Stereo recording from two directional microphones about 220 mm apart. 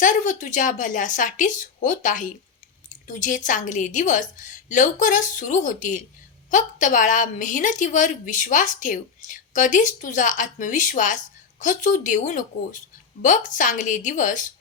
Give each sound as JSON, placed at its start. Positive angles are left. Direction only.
{"t": 0.0, "sound": "a woman's voice", "side_deg": 35}